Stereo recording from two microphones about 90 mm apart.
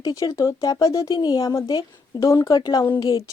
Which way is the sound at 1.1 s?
50° left (ahead or behind).